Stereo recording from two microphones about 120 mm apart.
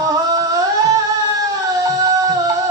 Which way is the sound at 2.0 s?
30° right (ahead or behind).